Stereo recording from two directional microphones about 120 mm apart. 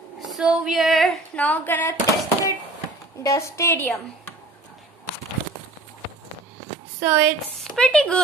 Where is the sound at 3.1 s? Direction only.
25° left (ahead or behind).